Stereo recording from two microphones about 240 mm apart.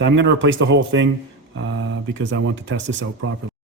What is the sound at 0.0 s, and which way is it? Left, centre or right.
A man's voice, right.